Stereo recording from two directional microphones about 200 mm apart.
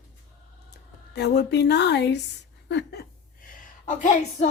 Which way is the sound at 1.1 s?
55° left (ahead or behind).